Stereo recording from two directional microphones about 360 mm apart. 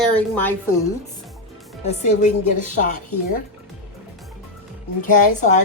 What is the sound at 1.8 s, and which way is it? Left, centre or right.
Speech, centre.